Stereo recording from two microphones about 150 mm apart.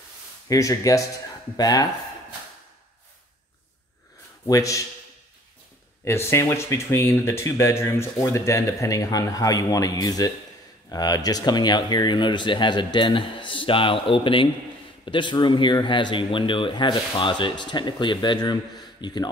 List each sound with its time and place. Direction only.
0.5 s speech: 20° left (ahead or behind)
4.5 s speech: 20° left (ahead or behind)
6.0 s speech: 15° left (ahead or behind)